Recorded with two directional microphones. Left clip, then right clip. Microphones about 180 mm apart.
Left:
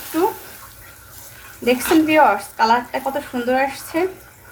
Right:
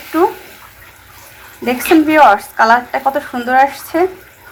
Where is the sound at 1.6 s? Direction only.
10° right (ahead or behind).